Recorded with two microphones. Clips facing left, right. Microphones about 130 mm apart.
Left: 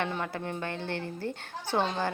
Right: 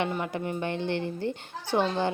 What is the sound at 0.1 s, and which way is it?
A woman's voice, 10° right (ahead or behind).